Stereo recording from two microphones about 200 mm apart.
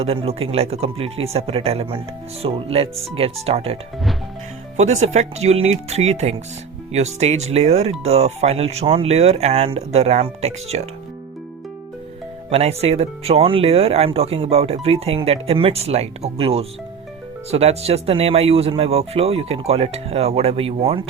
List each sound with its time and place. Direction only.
0.0 s speech: 30° right (ahead or behind)
4.8 s speech: 35° right (ahead or behind)
12.5 s speech: 30° right (ahead or behind)